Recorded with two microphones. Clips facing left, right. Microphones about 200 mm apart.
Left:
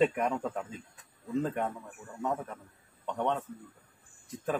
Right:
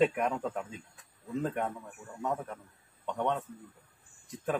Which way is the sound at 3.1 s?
Centre (ahead or behind).